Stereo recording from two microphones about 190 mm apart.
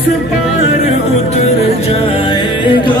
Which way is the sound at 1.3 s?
35° left (ahead or behind).